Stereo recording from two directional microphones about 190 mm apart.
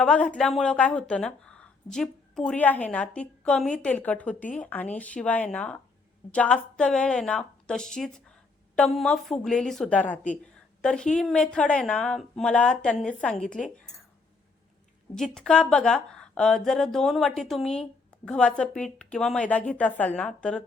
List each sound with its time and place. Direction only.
0.0 s a woman's voice: 5° left (ahead or behind)
15.1 s a woman's voice: 5° left (ahead or behind)